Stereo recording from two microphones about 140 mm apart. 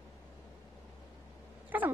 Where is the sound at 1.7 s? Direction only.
15° right (ahead or behind).